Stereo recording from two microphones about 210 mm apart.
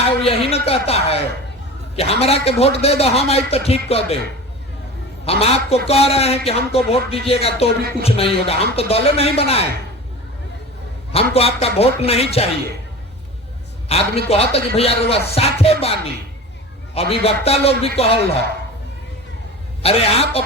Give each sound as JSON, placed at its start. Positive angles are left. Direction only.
{"t": 0.2, "sound": "a man's voice", "side_deg": 25}
{"t": 5.2, "sound": "a man's voice", "side_deg": 30}
{"t": 11.1, "sound": "a man's voice", "side_deg": 30}
{"t": 13.8, "sound": "a man's voice", "side_deg": 30}
{"t": 19.8, "sound": "a man's voice", "side_deg": 30}